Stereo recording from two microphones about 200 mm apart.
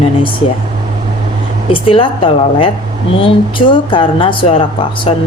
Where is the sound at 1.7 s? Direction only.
25° left (ahead or behind).